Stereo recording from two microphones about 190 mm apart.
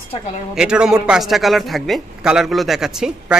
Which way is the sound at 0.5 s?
5° right (ahead or behind).